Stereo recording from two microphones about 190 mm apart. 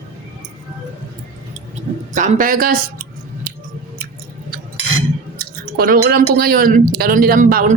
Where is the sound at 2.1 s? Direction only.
40° right (ahead or behind).